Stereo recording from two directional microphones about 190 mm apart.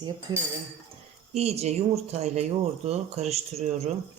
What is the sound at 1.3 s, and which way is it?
Speech, 35° right (ahead or behind).